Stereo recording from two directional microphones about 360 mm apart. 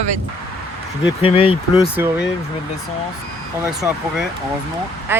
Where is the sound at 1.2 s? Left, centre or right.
Centre.